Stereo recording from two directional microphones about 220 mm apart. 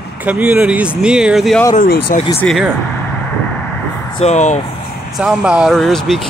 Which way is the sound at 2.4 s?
Centre (ahead or behind).